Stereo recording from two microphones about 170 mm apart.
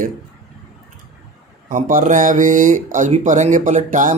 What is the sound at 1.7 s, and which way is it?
Speech, 50° right (ahead or behind).